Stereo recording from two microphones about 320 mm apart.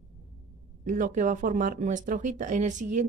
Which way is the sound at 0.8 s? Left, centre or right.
Right.